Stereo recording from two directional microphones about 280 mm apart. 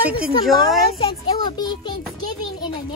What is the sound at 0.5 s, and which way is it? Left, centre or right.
Speech, centre.